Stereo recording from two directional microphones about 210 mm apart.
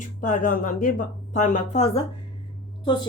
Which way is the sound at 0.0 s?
40° left (ahead or behind).